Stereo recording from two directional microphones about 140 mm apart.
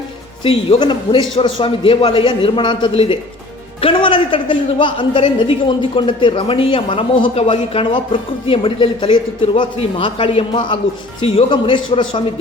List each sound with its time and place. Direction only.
0.4 s a woman's voice: 40° left (ahead or behind)